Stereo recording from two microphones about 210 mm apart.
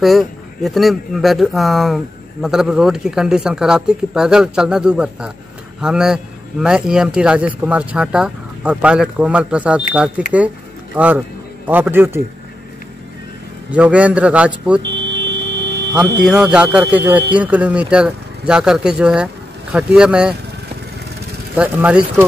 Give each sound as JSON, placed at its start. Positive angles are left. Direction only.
{"t": 0.0, "sound": "a man's voice", "side_deg": 0}
{"t": 13.7, "sound": "a man's voice", "side_deg": -5}
{"t": 14.8, "sound": "buzzer", "side_deg": -55}
{"t": 16.3, "sound": "a man's voice", "side_deg": -5}
{"t": 21.5, "sound": "a man's voice", "side_deg": -5}